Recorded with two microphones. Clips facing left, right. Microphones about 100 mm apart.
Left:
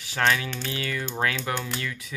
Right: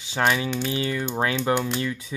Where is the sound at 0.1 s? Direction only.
20° right (ahead or behind).